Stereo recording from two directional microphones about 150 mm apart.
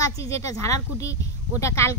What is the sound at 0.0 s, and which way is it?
A woman's voice, 20° left (ahead or behind).